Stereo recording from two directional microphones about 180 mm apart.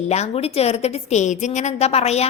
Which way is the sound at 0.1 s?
35° left (ahead or behind).